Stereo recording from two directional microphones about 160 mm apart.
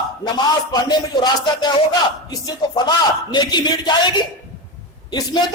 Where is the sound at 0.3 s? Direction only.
25° left (ahead or behind).